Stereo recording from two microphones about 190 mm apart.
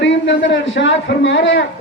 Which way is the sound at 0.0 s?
75° left (ahead or behind).